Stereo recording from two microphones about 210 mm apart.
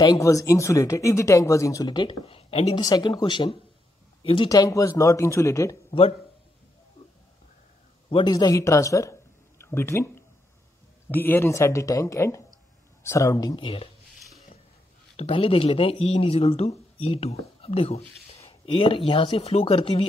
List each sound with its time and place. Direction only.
0.0 s speech: 15° left (ahead or behind)
5.9 s speech: 25° left (ahead or behind)
8.1 s speech: 20° left (ahead or behind)
9.6 s a sound: 10° left (ahead or behind)
11.1 s speech: 10° left (ahead or behind)
15.1 s speech: 25° left (ahead or behind)